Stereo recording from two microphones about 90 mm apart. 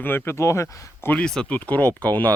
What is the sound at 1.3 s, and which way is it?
Speech, 15° left (ahead or behind).